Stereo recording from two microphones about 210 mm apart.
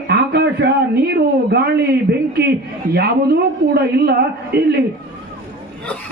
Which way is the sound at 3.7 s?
50° right (ahead or behind).